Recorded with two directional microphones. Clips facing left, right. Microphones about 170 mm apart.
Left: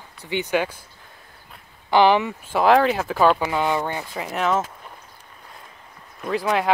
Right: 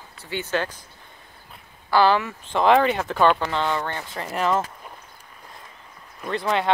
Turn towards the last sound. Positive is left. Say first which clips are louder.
# left 2 dB
turn(degrees=5)  # may be behind; listen again after turning